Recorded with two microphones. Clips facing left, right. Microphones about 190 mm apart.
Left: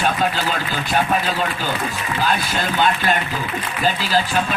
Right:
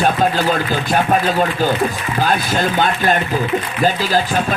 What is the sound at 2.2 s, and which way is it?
Speech, 45° right (ahead or behind).